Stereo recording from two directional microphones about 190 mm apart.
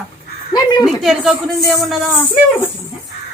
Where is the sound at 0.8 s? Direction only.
Centre (ahead or behind).